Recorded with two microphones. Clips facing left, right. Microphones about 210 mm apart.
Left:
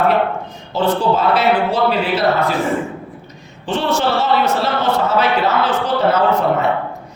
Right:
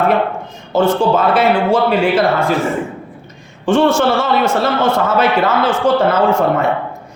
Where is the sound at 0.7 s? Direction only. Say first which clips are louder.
Right 3 dB; 50° right (ahead or behind).